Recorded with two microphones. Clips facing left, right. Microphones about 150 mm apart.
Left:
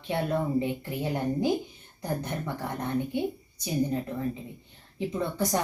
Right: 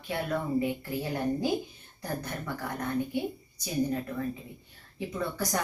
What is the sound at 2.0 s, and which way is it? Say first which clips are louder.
Speech: left 3 dB; 20° left (ahead or behind).